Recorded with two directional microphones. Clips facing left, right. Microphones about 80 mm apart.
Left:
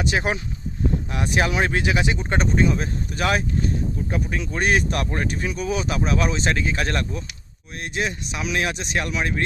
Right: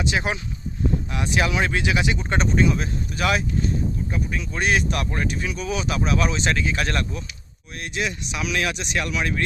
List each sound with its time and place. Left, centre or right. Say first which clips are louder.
0.0 s speech: left 1 dB; left